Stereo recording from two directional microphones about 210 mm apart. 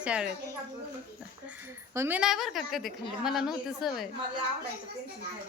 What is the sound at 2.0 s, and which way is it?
Speech, 10° right (ahead or behind).